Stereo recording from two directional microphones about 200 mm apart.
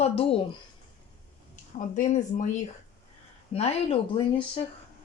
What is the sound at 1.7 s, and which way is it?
Speech, 40° left (ahead or behind).